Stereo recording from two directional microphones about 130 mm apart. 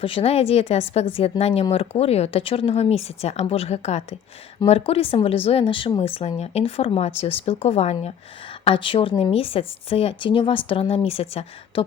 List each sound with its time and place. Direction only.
0.0 s a woman's voice: 45° left (ahead or behind)
8.6 s a woman's voice: 40° left (ahead or behind)